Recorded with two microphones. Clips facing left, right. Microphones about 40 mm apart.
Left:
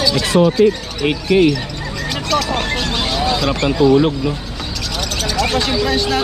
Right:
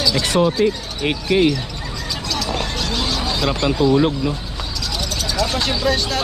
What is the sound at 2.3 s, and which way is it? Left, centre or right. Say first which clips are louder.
Speech: left 6 dB; left.